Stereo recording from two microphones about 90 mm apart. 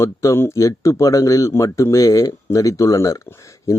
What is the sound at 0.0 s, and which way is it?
Speech, 35° left (ahead or behind).